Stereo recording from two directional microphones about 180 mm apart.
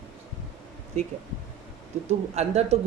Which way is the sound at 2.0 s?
35° right (ahead or behind).